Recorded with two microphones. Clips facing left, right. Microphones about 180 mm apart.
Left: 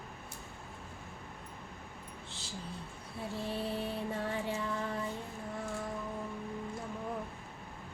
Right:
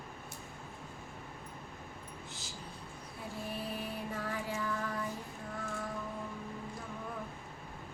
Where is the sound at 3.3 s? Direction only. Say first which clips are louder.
Left 4 dB; 30° left (ahead or behind).